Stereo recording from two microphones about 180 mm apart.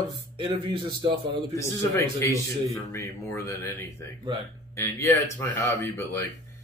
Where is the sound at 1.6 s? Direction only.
15° left (ahead or behind).